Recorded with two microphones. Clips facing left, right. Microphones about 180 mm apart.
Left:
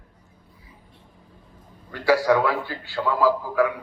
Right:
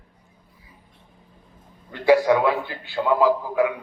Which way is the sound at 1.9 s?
20° right (ahead or behind).